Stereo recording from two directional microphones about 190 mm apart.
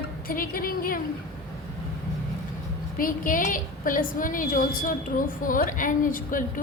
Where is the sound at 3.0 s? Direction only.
45° left (ahead or behind).